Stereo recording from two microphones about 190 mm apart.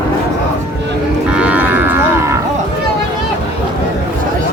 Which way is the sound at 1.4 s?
5° right (ahead or behind).